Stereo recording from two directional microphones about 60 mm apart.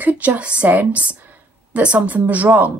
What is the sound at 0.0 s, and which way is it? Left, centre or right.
Speech, right.